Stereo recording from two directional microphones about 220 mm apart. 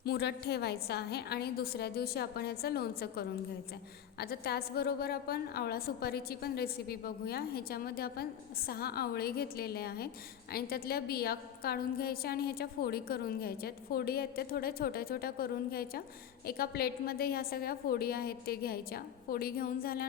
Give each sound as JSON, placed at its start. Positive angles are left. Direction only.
{"t": 0.0, "sound": "a woman's voice", "side_deg": 50}